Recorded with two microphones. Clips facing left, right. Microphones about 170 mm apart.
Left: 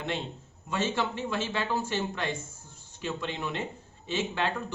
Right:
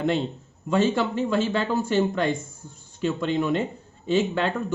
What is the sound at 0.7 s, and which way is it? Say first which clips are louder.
Speech: right 8 dB; 50° right (ahead or behind).